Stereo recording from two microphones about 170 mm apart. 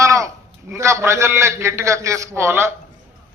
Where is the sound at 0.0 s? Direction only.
20° right (ahead or behind).